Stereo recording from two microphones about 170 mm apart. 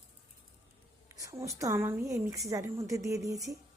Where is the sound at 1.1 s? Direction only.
20° right (ahead or behind).